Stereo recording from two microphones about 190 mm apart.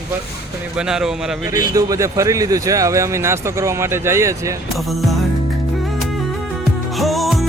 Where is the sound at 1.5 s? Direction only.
20° right (ahead or behind).